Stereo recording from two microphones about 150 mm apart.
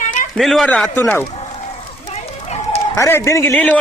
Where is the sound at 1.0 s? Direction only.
15° left (ahead or behind).